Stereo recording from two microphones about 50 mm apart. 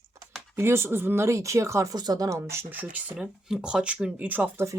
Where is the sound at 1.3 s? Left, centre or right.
Right.